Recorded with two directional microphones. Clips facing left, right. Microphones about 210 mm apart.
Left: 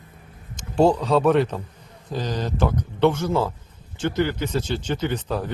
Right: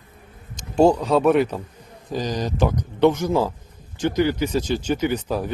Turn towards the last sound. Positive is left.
turn(degrees=-10)  # may be behind; listen again after turning